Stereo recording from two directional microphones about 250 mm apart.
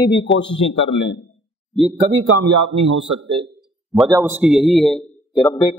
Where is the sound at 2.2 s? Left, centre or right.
Right.